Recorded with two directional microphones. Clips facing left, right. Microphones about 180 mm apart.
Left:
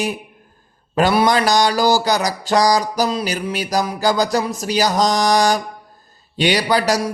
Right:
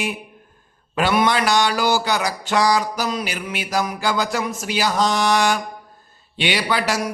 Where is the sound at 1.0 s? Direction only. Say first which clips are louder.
Left 3 dB; 40° left (ahead or behind).